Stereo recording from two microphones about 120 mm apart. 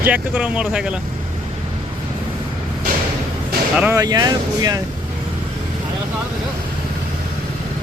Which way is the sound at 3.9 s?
30° right (ahead or behind).